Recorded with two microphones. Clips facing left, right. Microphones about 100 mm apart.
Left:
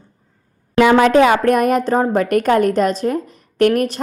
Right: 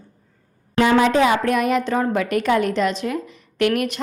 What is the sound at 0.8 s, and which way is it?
A woman's voice, 65° left (ahead or behind).